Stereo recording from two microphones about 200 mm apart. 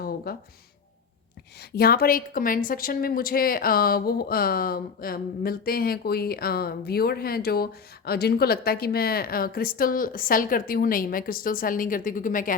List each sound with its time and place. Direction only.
0.3 s a woman's voice: 50° left (ahead or behind)
1.7 s a woman's voice: 50° left (ahead or behind)